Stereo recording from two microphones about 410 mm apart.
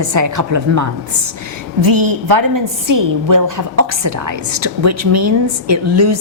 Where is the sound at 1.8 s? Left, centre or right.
Right.